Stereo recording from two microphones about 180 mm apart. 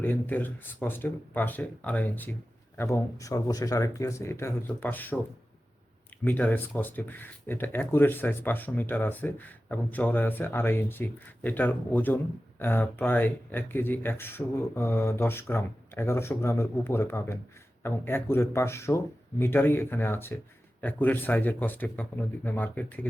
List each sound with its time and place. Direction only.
0.0 s speech: 10° left (ahead or behind)
6.2 s speech: 10° left (ahead or behind)